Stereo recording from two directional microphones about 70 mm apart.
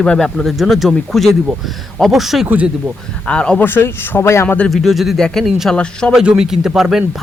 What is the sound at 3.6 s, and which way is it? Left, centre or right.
Speech, left.